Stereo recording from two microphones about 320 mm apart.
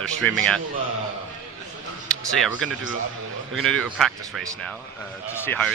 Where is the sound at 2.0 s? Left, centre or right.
Centre.